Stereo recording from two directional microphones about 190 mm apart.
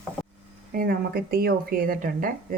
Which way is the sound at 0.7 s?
50° right (ahead or behind).